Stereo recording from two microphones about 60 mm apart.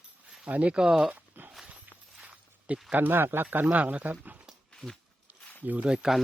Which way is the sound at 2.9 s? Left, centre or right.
Right.